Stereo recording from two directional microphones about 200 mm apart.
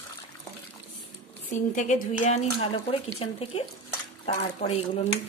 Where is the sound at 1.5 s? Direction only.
40° left (ahead or behind).